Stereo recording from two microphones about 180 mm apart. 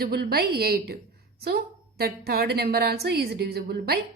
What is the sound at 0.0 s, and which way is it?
A woman's voice, 60° right (ahead or behind).